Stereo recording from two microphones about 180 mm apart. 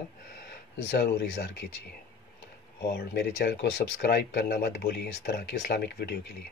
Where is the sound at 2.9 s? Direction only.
70° left (ahead or behind).